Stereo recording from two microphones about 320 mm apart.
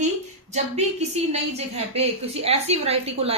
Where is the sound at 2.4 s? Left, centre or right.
Centre.